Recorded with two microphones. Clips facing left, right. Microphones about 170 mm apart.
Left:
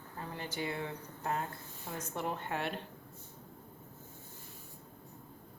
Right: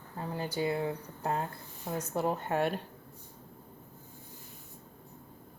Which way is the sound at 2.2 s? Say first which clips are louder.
Right 7 dB; 40° right (ahead or behind).